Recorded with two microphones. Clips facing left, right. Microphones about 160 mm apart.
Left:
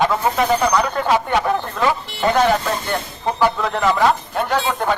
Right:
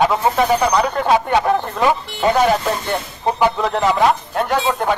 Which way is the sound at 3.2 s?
15° right (ahead or behind).